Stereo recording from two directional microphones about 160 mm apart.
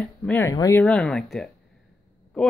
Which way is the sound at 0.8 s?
5° left (ahead or behind).